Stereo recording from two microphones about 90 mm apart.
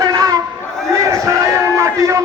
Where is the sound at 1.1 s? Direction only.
35° right (ahead or behind).